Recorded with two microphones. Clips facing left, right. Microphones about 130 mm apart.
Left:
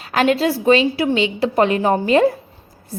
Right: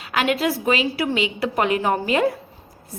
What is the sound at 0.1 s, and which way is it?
A woman's voice, 35° left (ahead or behind).